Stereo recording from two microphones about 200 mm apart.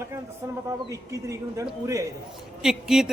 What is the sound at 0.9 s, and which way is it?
A man's voice, 15° right (ahead or behind).